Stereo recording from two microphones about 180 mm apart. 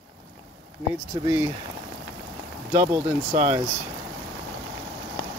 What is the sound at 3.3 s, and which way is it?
Speech, 40° right (ahead or behind).